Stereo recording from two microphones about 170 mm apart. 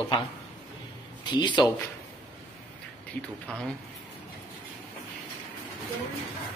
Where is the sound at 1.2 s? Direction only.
25° left (ahead or behind).